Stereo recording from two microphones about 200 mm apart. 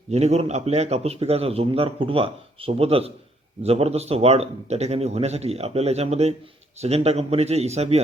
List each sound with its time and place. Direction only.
0.1 s speech: 35° right (ahead or behind)